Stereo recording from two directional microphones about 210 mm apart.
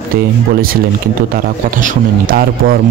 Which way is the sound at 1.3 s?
40° right (ahead or behind).